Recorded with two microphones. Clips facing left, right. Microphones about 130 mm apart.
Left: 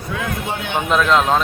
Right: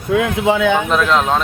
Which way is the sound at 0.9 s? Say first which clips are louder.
Even; centre (ahead or behind).